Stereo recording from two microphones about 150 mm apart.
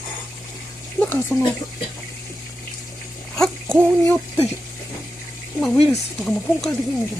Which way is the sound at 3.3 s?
5° left (ahead or behind).